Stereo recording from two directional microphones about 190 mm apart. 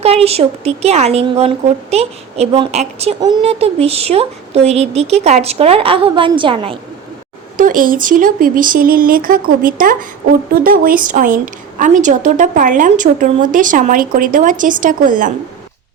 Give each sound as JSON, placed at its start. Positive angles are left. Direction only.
{"t": 0.0, "sound": "speech", "side_deg": -30}
{"t": 7.5, "sound": "a woman's voice", "side_deg": -45}